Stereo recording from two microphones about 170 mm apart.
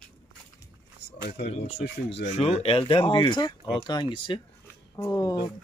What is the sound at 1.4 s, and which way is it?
Speech, 40° left (ahead or behind).